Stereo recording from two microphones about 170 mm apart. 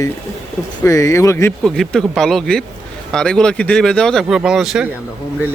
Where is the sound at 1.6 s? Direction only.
Centre (ahead or behind).